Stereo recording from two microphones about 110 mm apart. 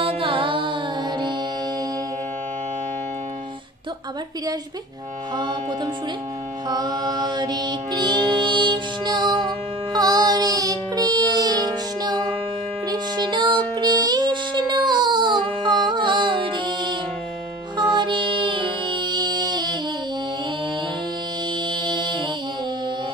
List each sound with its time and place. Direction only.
0.0 s music: 55° right (ahead or behind)
5.3 s music: 45° right (ahead or behind)
6.7 s music: 40° right (ahead or behind)
21.6 s music: 45° right (ahead or behind)